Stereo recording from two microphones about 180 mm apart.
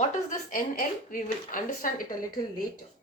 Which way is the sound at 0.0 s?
45° left (ahead or behind).